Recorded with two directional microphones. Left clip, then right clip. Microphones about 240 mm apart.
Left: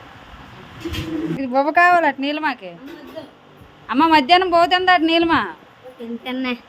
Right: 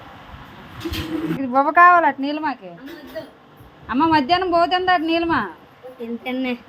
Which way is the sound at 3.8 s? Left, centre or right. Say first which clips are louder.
Left 3 dB; left.